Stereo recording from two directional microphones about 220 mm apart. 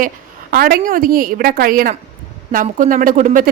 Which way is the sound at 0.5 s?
40° right (ahead or behind).